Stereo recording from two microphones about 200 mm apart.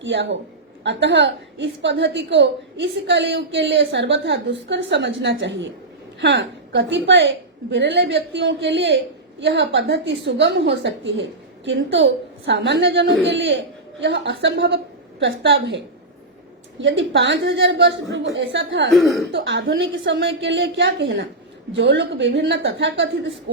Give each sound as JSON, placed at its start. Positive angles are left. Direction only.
{"t": 0.0, "sound": "a woman's voice", "side_deg": -65}
{"t": 16.8, "sound": "a woman's voice", "side_deg": -65}
{"t": 18.9, "sound": "speech", "side_deg": 0}
{"t": 19.3, "sound": "a woman's voice", "side_deg": -65}